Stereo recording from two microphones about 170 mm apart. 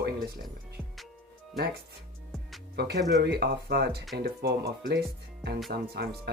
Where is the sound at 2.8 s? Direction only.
70° right (ahead or behind).